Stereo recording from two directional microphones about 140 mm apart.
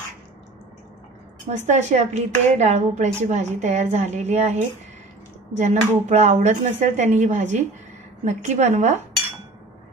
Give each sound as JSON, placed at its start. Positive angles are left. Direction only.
{"t": 1.7, "sound": "speech", "side_deg": -55}